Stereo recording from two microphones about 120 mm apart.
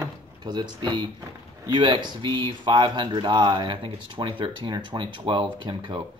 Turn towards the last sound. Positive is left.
turn(degrees=-40)  # may be behind; listen again after turning